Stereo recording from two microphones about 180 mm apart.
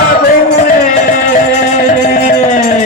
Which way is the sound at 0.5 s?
45° left (ahead or behind).